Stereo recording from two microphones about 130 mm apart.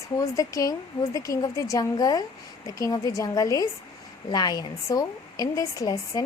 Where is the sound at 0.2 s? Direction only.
25° left (ahead or behind).